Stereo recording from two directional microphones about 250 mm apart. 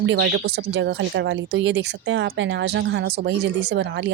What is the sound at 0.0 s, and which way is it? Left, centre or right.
Speech, right.